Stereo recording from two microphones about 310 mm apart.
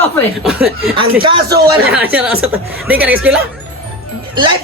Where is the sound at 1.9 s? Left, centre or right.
Centre.